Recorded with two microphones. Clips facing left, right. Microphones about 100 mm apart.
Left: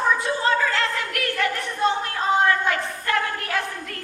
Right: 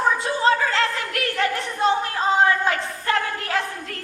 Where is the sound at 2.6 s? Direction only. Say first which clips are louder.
Right 2 dB; 25° right (ahead or behind).